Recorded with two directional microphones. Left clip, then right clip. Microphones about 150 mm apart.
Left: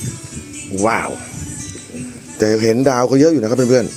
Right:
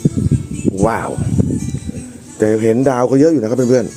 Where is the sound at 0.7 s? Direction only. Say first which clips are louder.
Left 1 dB; 30° right (ahead or behind).